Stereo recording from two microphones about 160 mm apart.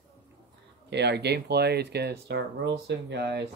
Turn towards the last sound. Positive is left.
turn(degrees=-90)